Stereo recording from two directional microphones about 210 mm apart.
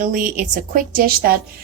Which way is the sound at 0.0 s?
40° right (ahead or behind).